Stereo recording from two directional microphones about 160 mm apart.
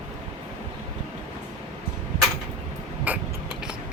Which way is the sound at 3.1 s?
10° right (ahead or behind).